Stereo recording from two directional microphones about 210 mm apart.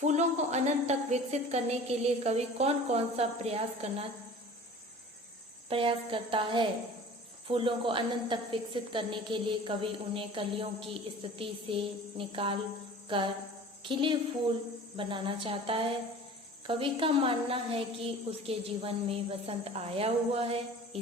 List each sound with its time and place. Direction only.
0.0 s a sound: 35° right (ahead or behind)
5.6 s a woman's voice: 25° right (ahead or behind)
13.1 s cricket: 25° right (ahead or behind)
13.8 s a woman's voice: 25° right (ahead or behind)